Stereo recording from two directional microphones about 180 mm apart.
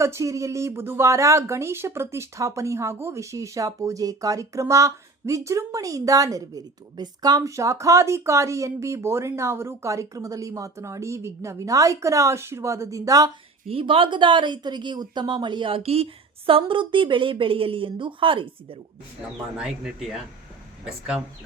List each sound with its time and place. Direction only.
0.0 s speech: 15° right (ahead or behind)
13.7 s a woman's voice: 30° right (ahead or behind)
19.5 s speech: 5° right (ahead or behind)